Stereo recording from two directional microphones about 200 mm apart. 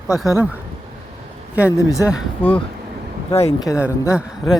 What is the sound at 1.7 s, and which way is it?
Speech, 15° left (ahead or behind).